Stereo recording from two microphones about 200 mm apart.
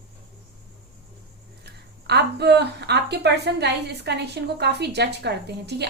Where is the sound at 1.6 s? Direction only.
55° right (ahead or behind).